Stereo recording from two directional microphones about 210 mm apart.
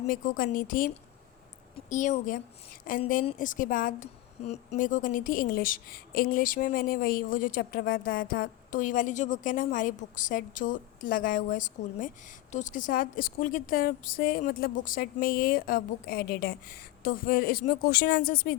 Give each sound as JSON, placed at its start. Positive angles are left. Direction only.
{"t": 0.1, "sound": "a woman's voice", "side_deg": 40}